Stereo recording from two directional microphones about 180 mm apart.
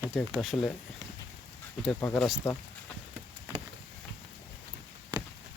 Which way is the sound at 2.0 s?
10° left (ahead or behind).